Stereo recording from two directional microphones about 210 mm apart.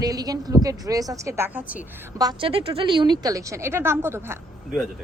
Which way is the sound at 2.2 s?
25° right (ahead or behind).